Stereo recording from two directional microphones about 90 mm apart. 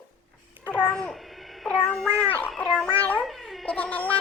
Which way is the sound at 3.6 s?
15° left (ahead or behind).